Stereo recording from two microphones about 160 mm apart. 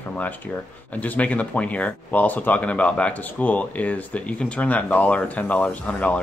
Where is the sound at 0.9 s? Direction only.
10° left (ahead or behind).